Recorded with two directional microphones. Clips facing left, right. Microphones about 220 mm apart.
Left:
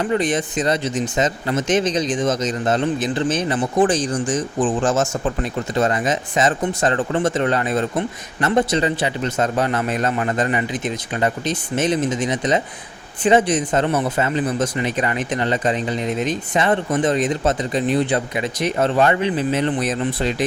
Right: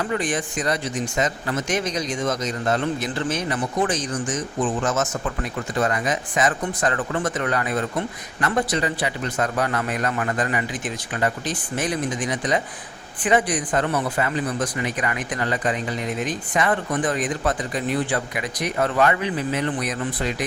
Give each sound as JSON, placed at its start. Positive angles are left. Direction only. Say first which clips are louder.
{"t": 0.0, "sound": "speech", "louder": "left 5 dB", "side_deg": 20}